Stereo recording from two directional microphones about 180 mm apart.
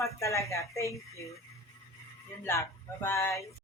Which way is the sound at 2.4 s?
15° left (ahead or behind).